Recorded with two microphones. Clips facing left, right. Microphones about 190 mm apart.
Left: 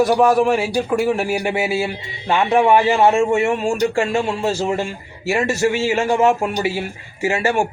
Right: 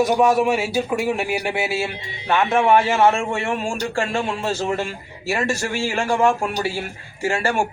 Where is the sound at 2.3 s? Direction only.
15° left (ahead or behind).